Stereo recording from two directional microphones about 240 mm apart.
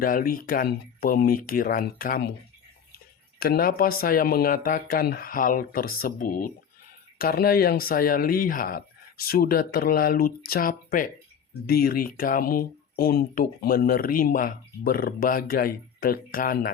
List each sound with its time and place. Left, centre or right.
0.0 s speech: left
3.4 s speech: left